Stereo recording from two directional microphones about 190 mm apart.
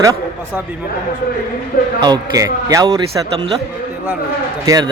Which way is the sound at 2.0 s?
20° right (ahead or behind).